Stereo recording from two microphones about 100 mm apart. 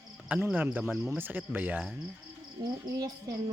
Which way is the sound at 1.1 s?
20° right (ahead or behind).